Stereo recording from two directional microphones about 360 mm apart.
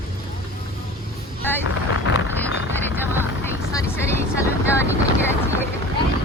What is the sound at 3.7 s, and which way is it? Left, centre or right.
Speech, centre.